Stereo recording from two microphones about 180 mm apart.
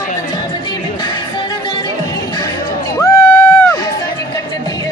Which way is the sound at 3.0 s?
15° left (ahead or behind).